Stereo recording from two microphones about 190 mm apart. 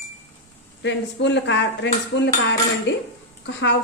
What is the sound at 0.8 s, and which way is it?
Cutlery, 70° left (ahead or behind).